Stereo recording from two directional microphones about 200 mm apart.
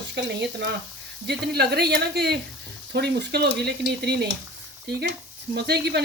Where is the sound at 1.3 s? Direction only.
55° right (ahead or behind).